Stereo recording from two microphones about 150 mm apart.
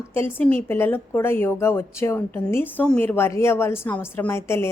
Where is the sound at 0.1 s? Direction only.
15° left (ahead or behind).